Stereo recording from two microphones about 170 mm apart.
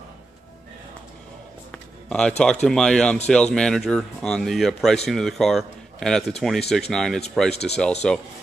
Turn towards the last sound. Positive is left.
turn(degrees=0)  # may be behind; listen again after turning